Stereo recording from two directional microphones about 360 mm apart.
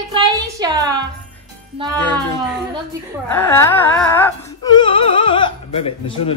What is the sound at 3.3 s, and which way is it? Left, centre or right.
Music, centre.